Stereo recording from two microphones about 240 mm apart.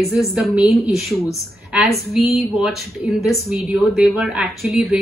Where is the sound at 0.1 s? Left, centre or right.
Centre.